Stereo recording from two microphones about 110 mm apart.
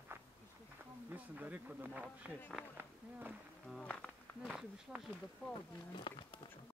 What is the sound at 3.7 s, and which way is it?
Insect, 5° left (ahead or behind).